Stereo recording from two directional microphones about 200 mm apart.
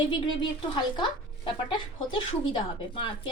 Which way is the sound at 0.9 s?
20° left (ahead or behind).